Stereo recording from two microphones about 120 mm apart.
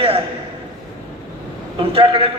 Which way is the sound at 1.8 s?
50° right (ahead or behind).